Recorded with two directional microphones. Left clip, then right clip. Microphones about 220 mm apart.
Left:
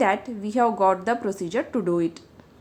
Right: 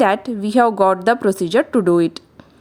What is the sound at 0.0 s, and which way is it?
A woman's voice, 40° right (ahead or behind).